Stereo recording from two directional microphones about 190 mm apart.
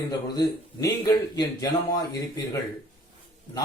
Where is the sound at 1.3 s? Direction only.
20° left (ahead or behind).